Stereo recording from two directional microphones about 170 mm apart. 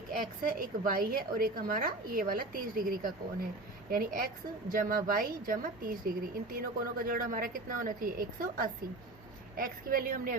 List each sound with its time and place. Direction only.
0.1 s a woman's voice: 55° right (ahead or behind)